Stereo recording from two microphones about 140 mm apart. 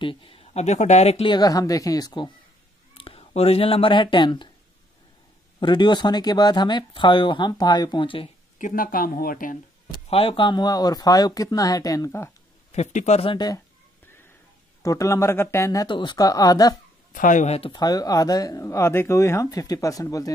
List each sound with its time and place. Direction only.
0.0 s speech: 35° left (ahead or behind)
1.2 s speech: 30° left (ahead or behind)
2.9 s speech: 45° left (ahead or behind)
5.6 s speech: 35° left (ahead or behind)
8.5 s speech: 75° left (ahead or behind)
10.0 s speech: 40° left (ahead or behind); by 12.3 s 20° left (ahead or behind)
12.7 s speech: 55° left (ahead or behind)
14.8 s speech: 25° left (ahead or behind)
17.1 s speech: 70° left (ahead or behind)
17.6 s speech: 35° left (ahead or behind)